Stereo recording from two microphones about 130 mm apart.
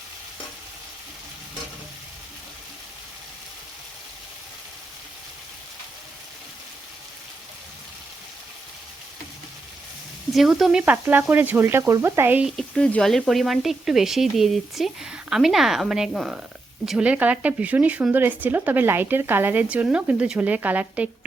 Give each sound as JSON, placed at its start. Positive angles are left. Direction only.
{"t": 10.3, "sound": "speech", "side_deg": 0}
{"t": 10.9, "sound": "speech", "side_deg": -15}
{"t": 12.5, "sound": "speech", "side_deg": 5}